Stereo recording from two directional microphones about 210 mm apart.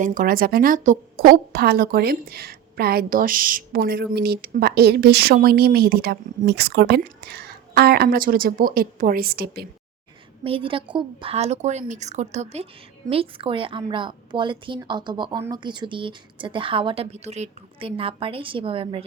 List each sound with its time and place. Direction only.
0.0 s a woman's voice: 40° right (ahead or behind)
10.4 s a woman's voice: 25° right (ahead or behind)